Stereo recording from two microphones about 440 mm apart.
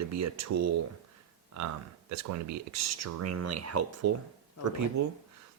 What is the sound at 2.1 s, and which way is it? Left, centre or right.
Speech, right.